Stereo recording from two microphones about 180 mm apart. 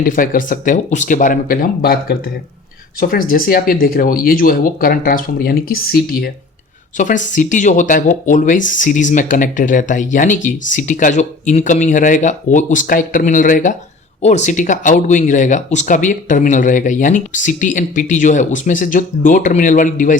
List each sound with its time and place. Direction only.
0.1 s speech: 50° left (ahead or behind)
6.9 s speech: 45° left (ahead or behind)